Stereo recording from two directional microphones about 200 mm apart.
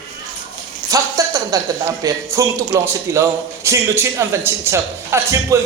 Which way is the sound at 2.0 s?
15° right (ahead or behind).